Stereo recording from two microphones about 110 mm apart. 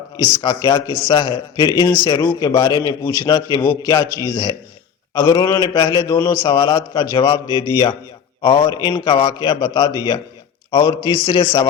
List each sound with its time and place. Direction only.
0.4 s a man's voice: 40° left (ahead or behind)
1.1 s a man's voice: 45° left (ahead or behind)